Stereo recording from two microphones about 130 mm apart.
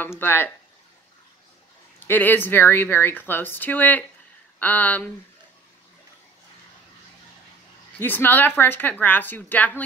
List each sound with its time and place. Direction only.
0.2 s speech: 15° left (ahead or behind)
2.0 s speech: 15° left (ahead or behind)
8.0 s speech: 15° left (ahead or behind)